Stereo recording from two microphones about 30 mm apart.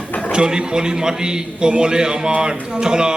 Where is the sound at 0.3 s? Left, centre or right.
Right.